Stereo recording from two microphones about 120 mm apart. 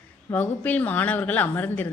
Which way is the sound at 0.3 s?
15° left (ahead or behind).